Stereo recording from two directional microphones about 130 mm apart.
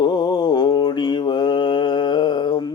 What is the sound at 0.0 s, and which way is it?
Mantra, 35° left (ahead or behind).